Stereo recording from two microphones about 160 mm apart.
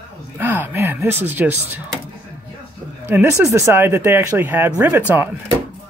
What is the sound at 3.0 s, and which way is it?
Speech, 10° right (ahead or behind).